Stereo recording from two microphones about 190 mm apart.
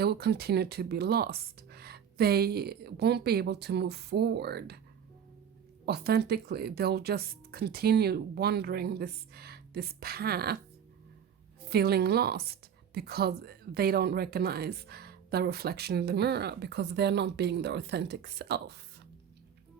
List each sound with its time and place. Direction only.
0.0 s a woman's voice: 60° right (ahead or behind)
5.8 s a woman's voice: 55° right (ahead or behind)
11.7 s a woman's voice: 55° right (ahead or behind)